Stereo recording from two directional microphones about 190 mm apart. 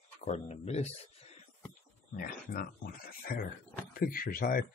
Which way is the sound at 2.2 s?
45° left (ahead or behind).